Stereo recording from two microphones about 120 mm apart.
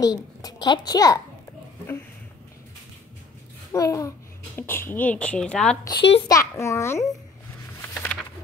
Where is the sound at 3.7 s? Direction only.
25° left (ahead or behind); by 5.8 s 10° left (ahead or behind).